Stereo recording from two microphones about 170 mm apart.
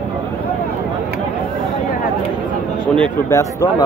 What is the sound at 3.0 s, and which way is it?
Speech, 20° left (ahead or behind).